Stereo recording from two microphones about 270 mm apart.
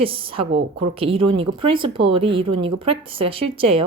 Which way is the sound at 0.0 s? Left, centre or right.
Centre.